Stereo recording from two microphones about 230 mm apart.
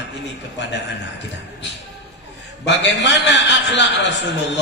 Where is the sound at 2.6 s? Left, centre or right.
Left.